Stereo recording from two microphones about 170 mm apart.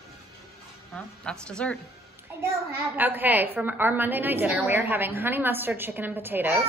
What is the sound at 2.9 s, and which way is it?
A woman's voice, 10° right (ahead or behind).